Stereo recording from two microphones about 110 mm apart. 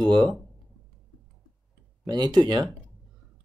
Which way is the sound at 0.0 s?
35° right (ahead or behind).